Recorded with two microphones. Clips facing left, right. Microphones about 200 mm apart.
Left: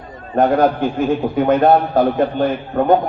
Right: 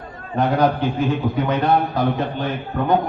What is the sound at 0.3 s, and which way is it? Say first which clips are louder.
A man's voice: left 4 dB; 50° left (ahead or behind).